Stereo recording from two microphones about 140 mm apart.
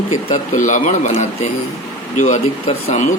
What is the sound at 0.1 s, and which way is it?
Speech, 60° left (ahead or behind).